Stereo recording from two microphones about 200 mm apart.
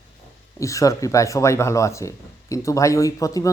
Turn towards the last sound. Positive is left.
turn(degrees=15)  # may be behind; listen again after turning